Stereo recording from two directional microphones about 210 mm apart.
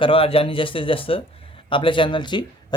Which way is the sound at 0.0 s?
25° left (ahead or behind).